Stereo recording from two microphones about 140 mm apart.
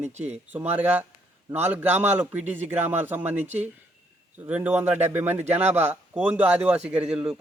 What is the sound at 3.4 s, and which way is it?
Speech, 55° right (ahead or behind).